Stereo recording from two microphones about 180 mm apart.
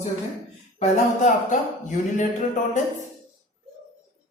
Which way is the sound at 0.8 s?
40° left (ahead or behind).